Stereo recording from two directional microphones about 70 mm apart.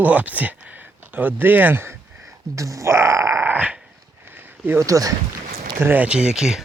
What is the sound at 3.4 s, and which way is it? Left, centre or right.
Dog, right.